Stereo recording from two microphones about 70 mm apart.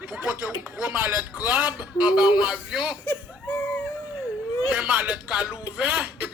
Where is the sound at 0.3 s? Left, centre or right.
Right; by 3.0 s centre.